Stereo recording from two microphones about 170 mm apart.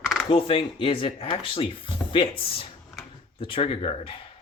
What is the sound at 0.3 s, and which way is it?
Speech, 30° left (ahead or behind).